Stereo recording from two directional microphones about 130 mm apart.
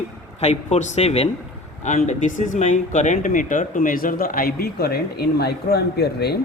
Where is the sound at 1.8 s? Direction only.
65° left (ahead or behind); by 4.4 s 90° left.